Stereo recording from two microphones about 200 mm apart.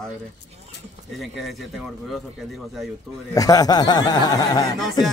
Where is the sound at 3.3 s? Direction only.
20° left (ahead or behind).